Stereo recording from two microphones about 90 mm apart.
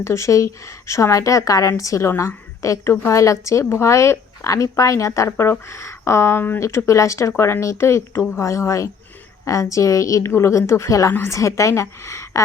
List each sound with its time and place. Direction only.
0.0 s a woman's voice: 30° left (ahead or behind)